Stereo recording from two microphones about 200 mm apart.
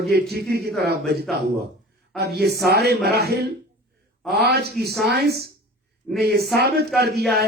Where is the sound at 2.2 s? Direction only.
55° right (ahead or behind).